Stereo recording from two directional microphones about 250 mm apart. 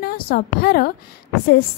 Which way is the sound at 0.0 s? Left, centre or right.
Left.